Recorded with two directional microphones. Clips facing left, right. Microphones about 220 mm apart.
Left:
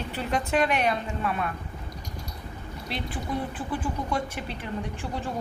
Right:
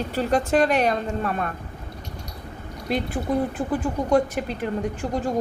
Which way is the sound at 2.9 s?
45° right (ahead or behind).